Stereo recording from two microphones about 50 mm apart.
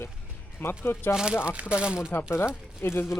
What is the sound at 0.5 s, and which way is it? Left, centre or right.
Speech, left.